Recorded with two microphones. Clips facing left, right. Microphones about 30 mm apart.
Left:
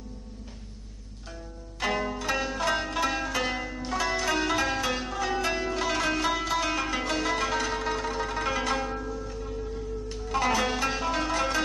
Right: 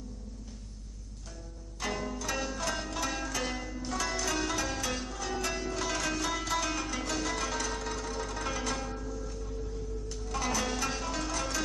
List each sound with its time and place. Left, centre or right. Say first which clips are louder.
1.8 s zither: left 6 dB; left